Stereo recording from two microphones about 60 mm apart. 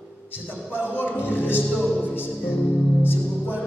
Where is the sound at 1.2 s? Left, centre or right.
Left.